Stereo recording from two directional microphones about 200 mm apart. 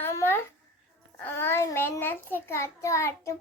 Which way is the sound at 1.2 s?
10° left (ahead or behind).